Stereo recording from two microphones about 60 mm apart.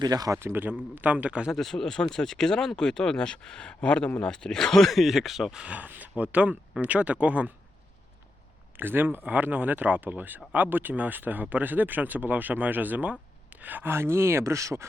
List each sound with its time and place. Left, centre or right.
0.0 s a man's voice: right
0.3 s speech: right
1.5 s speech: centre
5.7 s speech: right
8.7 s speech: right
13.9 s speech: right